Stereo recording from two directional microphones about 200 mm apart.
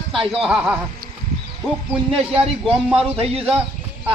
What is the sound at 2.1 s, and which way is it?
A man's voice, 30° right (ahead or behind).